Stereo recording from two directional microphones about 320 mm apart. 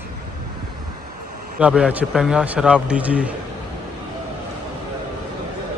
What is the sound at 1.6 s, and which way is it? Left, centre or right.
Speech, centre.